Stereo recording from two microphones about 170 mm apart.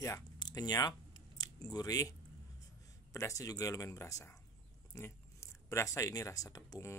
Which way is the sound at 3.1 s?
20° left (ahead or behind).